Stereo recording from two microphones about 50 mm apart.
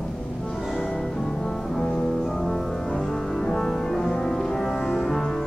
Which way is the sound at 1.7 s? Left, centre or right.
Centre.